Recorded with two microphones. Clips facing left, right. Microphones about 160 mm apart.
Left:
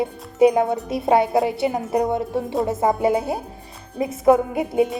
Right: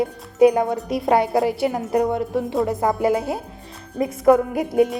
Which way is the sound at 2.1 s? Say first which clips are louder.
Right 1 dB; 25° left (ahead or behind).